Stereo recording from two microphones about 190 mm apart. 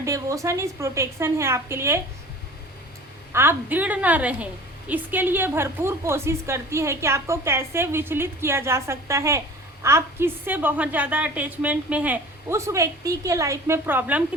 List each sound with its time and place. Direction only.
0.0 s a woman's voice: 15° right (ahead or behind)
3.3 s a woman's voice: 10° right (ahead or behind)